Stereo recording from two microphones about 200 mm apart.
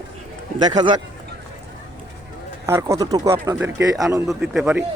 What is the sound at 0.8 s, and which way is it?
Speech, 20° right (ahead or behind).